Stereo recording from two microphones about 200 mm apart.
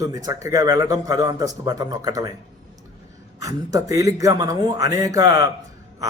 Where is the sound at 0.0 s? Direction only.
20° right (ahead or behind).